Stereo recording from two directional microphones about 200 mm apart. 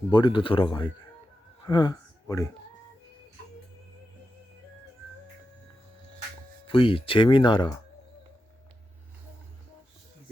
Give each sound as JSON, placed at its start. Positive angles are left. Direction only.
{"t": 0.1, "sound": "speech", "side_deg": 25}
{"t": 1.6, "sound": "a sound", "side_deg": 20}
{"t": 6.7, "sound": "speech", "side_deg": 25}